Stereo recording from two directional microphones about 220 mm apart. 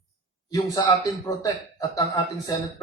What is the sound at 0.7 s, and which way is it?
A man's voice, 15° left (ahead or behind).